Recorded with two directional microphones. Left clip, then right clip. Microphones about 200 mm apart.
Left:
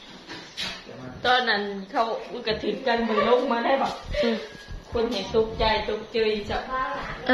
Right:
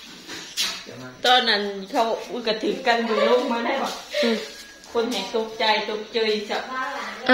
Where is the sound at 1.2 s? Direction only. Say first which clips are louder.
Right 3 dB; 65° right (ahead or behind).